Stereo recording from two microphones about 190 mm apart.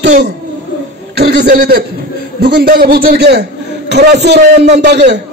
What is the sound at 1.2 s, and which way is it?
A man's voice, 55° right (ahead or behind).